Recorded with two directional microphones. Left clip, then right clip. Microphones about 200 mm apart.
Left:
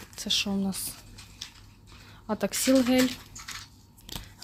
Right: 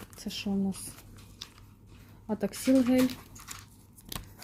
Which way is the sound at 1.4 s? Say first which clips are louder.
Left 3 dB; 25° right (ahead or behind).